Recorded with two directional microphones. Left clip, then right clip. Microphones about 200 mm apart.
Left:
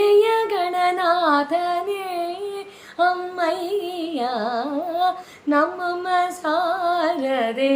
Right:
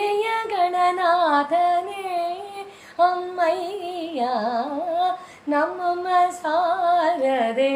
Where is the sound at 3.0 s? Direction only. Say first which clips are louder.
Right 1 dB; 20° left (ahead or behind).